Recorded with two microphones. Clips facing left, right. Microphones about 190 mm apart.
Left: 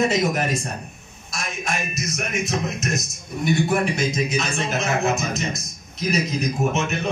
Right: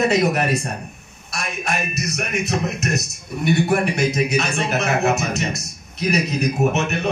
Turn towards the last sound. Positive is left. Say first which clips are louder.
# right 3 dB
turn(degrees=-65)  # may be behind; listen again after turning